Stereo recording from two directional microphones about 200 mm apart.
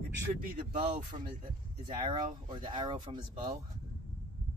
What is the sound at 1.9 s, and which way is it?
Speech, 25° right (ahead or behind).